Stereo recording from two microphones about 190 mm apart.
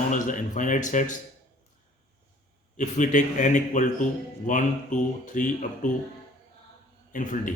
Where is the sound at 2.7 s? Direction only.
40° left (ahead or behind).